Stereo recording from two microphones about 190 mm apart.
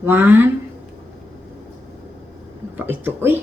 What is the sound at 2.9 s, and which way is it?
Speech, 10° right (ahead or behind).